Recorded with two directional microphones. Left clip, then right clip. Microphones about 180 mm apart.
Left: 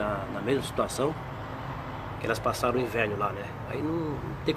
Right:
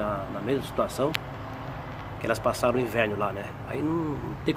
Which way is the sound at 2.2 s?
25° right (ahead or behind).